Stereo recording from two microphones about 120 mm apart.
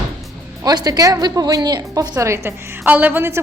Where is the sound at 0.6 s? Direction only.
35° right (ahead or behind); by 3.4 s 20° right (ahead or behind).